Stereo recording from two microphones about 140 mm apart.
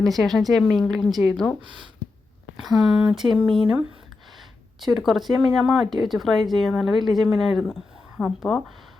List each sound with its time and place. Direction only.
0.0 s speech: centre (ahead or behind)
1.6 s speech: 35° right (ahead or behind)
2.6 s speech: centre (ahead or behind)